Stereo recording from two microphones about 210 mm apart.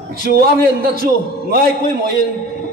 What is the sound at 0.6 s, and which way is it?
A man's voice, 45° right (ahead or behind).